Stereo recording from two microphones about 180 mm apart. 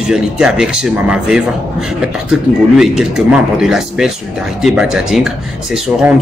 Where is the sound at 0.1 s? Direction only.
5° right (ahead or behind).